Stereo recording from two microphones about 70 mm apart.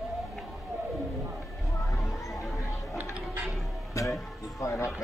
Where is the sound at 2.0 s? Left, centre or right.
Left.